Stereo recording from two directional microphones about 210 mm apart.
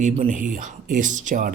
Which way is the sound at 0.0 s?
35° right (ahead or behind).